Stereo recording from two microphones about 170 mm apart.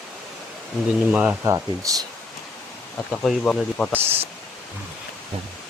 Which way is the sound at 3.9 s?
10° right (ahead or behind).